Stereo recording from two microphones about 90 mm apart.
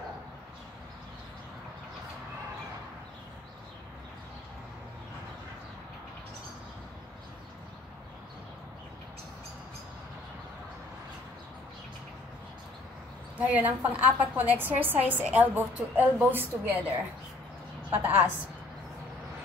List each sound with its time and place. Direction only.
13.4 s a woman's voice: 15° right (ahead or behind)
17.8 s a woman's voice: 25° right (ahead or behind)